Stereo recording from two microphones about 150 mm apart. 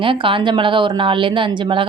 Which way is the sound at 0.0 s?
35° right (ahead or behind).